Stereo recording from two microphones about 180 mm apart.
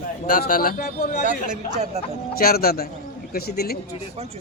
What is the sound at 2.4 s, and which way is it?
Speech, 55° left (ahead or behind).